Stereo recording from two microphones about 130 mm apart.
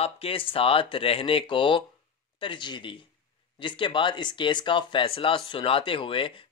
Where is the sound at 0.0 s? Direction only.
45° left (ahead or behind).